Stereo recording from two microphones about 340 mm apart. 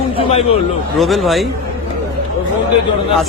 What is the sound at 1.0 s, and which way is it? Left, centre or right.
Speech, centre.